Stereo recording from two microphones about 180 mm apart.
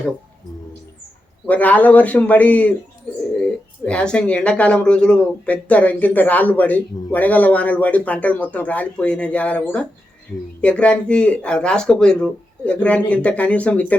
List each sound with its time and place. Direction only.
1.5 s speech: 10° left (ahead or behind)